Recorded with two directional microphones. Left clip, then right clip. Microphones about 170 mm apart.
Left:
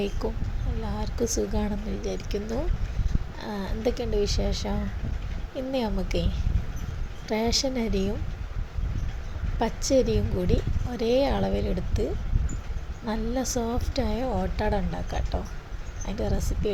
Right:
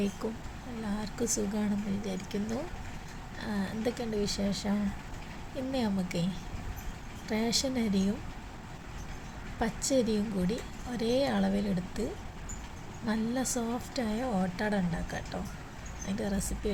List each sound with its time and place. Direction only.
0.2 s a woman's voice: 15° left (ahead or behind)
5.7 s a woman's voice: 15° left (ahead or behind)
9.6 s a woman's voice: 15° left (ahead or behind)
13.1 s a woman's voice: 15° left (ahead or behind)